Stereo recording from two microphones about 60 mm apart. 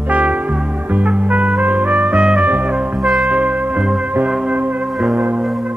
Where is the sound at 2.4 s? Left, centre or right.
Right.